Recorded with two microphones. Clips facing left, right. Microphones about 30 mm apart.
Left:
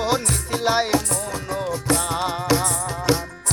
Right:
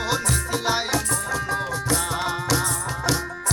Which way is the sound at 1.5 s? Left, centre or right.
Centre.